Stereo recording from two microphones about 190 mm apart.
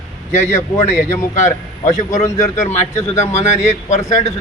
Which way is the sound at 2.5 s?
35° left (ahead or behind).